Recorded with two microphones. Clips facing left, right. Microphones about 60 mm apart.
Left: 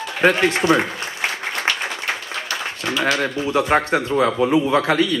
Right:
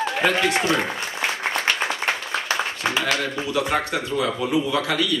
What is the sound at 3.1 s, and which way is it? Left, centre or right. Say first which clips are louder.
A man's voice: left 4 dB; left.